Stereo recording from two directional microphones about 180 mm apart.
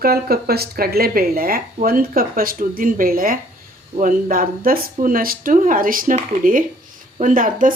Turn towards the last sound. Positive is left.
turn(degrees=-50)  # may be behind; listen again after turning